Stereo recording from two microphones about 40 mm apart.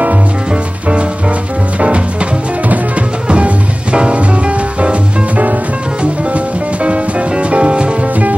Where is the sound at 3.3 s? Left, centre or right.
Right.